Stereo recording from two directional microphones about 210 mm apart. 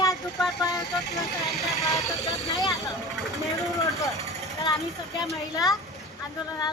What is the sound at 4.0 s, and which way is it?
Speech, 15° left (ahead or behind).